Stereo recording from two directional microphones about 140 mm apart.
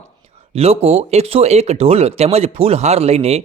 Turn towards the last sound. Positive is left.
turn(degrees=-50)  # may be behind; listen again after turning